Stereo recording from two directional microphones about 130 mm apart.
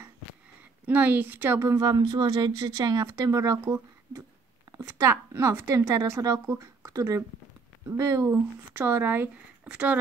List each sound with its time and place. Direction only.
0.8 s a woman's voice: 10° right (ahead or behind)